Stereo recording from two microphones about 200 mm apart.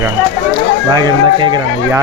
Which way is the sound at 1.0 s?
20° right (ahead or behind).